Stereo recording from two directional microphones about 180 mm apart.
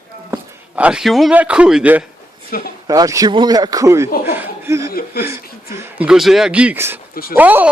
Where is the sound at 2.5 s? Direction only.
55° left (ahead or behind).